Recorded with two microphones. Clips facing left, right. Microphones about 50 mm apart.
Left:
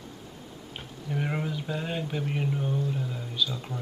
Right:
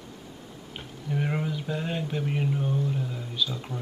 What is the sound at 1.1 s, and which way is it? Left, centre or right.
Speech, centre.